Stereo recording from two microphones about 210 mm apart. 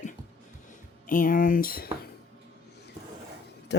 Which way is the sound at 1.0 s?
40° left (ahead or behind).